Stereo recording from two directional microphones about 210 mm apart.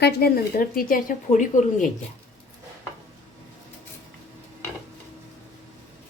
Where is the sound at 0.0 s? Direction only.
45° left (ahead or behind).